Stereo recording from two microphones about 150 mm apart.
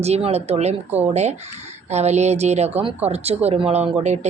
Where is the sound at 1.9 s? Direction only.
45° right (ahead or behind).